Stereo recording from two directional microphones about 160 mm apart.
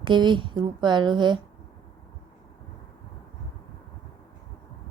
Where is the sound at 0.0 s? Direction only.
30° right (ahead or behind).